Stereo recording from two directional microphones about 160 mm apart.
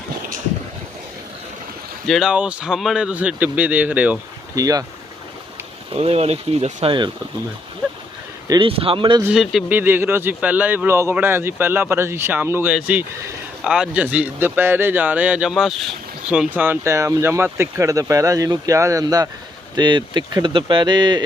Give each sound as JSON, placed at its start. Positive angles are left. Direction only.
{"t": 2.0, "sound": "speech", "side_deg": 0}
{"t": 4.5, "sound": "speech", "side_deg": -20}
{"t": 5.9, "sound": "speech", "side_deg": -40}
{"t": 8.4, "sound": "speech", "side_deg": -30}
{"t": 9.3, "sound": "speech", "side_deg": 0}